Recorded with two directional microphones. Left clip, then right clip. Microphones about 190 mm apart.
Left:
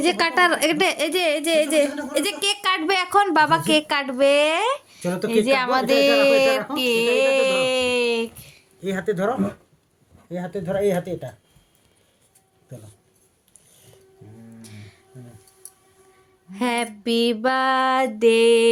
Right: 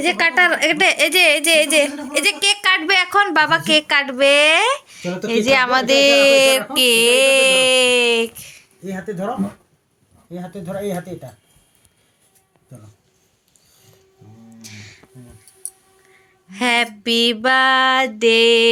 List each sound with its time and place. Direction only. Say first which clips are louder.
0.0 s a woman's voice: right 3 dB; 25° left (ahead or behind); by 6.7 s 5° right (ahead or behind)
6.7 s female singing: right 6 dB; 5° right (ahead or behind)
8.8 s a woman's voice: left 3 dB; 20° left (ahead or behind)
14.6 s music: right 7 dB; 5° left (ahead or behind)
15.6 s a sound: right 12 dB; 25° left (ahead or behind)
16.5 s female singing: right 7 dB; 5° left (ahead or behind)